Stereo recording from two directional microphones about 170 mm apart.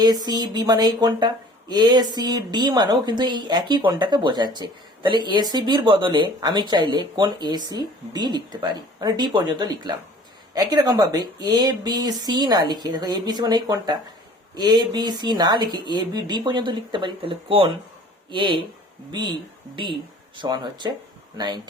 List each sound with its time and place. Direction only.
0.0 s speech: 25° right (ahead or behind)